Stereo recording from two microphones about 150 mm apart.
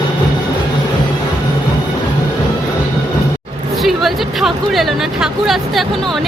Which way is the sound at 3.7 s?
Centre (ahead or behind).